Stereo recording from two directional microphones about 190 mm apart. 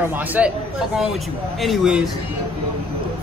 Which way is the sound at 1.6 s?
Centre (ahead or behind).